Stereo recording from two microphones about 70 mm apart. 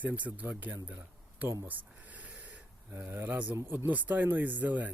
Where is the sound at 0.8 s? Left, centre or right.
Right.